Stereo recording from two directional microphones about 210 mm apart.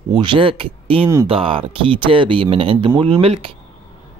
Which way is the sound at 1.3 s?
25° right (ahead or behind).